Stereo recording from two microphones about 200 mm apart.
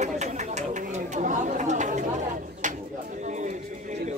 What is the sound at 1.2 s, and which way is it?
Speech, 40° right (ahead or behind).